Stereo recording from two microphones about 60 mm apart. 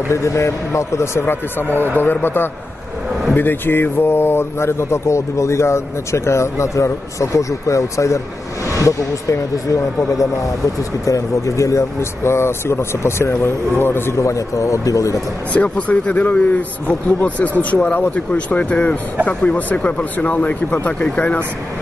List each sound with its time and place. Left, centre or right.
0.1 s a man's voice: left
12.2 s speech: left
14.1 s speech: left
15.5 s a man's voice: left